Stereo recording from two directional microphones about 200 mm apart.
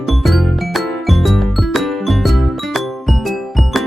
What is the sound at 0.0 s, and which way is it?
Music, centre (ahead or behind).